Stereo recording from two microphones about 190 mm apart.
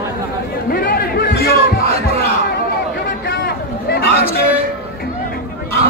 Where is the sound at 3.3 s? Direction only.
55° left (ahead or behind).